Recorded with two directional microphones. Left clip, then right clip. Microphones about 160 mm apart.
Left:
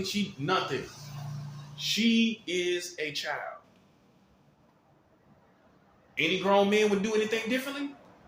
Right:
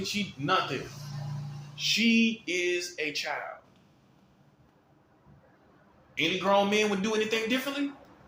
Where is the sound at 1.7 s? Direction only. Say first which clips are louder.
Right 2 dB; 20° left (ahead or behind).